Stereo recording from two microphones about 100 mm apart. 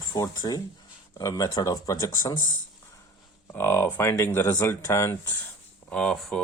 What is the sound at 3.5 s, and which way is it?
Speech, 20° left (ahead or behind).